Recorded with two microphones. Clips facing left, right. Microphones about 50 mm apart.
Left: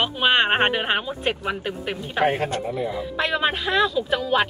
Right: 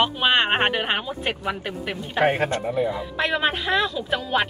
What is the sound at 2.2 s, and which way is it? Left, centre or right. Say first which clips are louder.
Speech: right 1 dB; right.